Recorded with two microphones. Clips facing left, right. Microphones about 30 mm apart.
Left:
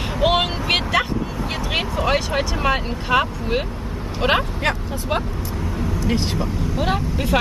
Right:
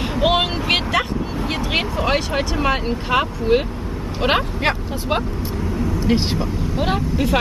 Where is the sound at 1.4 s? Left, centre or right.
Centre.